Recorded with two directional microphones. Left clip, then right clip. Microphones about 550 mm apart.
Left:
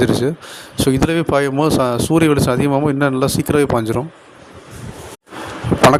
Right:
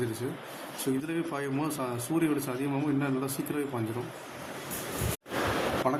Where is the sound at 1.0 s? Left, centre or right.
Centre.